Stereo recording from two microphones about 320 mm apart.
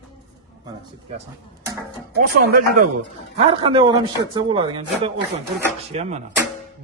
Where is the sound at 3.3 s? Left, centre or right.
Centre.